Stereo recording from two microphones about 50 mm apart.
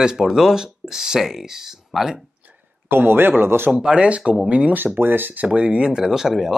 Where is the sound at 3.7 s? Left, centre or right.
Centre.